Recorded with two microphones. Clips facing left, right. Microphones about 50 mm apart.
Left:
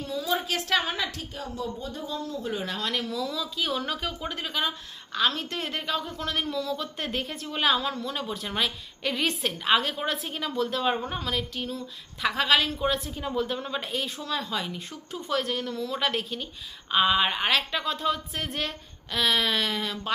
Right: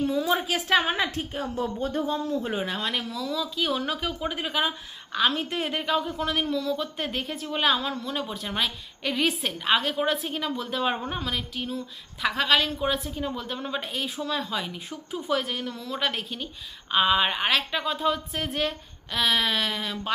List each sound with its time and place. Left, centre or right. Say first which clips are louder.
0.0 s a sound: right 4 dB; right
0.4 s a woman's voice: right 3 dB; centre
0.8 s a woman's voice: right 4 dB; right
2.6 s speech: right 1 dB; centre